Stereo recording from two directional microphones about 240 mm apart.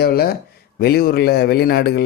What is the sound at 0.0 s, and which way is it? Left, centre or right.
A man's voice, left.